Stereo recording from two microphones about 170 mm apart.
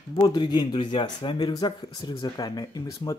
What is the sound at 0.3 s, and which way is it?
Speech, 25° left (ahead or behind).